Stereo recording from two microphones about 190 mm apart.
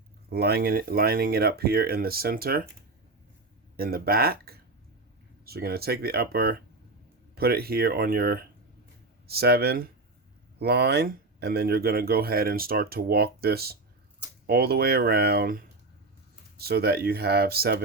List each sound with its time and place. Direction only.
0.3 s speech: 55° right (ahead or behind)
3.8 s speech: 50° right (ahead or behind)